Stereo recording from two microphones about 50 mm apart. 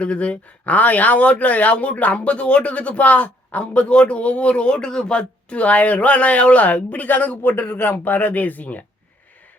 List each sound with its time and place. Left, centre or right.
0.0 s speech: left
7.5 s speech: left